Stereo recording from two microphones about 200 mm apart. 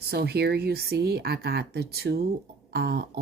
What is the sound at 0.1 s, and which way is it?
Speech, 55° right (ahead or behind).